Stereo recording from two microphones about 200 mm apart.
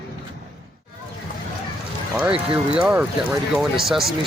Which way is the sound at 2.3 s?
25° right (ahead or behind).